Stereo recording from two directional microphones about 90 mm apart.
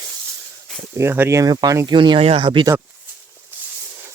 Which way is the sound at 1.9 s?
65° right (ahead or behind).